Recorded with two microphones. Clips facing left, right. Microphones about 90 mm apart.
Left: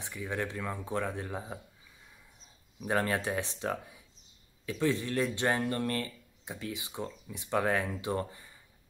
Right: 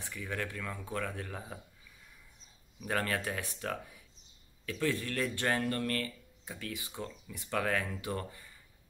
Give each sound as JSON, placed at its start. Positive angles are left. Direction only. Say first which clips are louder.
{"t": 0.0, "sound": "speech", "louder": "left 3 dB", "side_deg": 20}
{"t": 2.9, "sound": "speech", "louder": "left 4 dB", "side_deg": 25}